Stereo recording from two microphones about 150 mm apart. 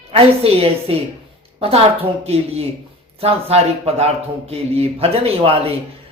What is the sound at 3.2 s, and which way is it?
Speech, 40° right (ahead or behind).